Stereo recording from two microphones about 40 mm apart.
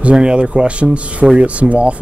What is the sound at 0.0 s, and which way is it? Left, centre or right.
Speech, right.